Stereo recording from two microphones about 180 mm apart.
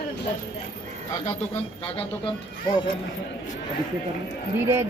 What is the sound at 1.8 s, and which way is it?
Speech, 30° left (ahead or behind).